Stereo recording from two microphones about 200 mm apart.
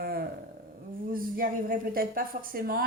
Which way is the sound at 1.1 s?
45° right (ahead or behind).